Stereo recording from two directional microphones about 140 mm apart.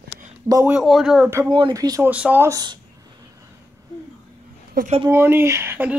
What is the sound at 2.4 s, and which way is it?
Speech, 30° right (ahead or behind).